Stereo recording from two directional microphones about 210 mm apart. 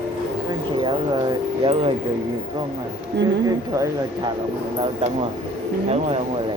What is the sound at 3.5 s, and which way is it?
Speech, 15° right (ahead or behind).